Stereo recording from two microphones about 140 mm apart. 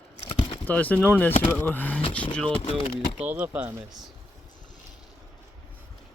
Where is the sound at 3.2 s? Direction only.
10° right (ahead or behind).